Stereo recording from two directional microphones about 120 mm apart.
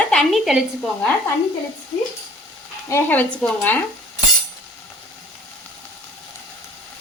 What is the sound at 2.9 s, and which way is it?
Speech, 20° left (ahead or behind).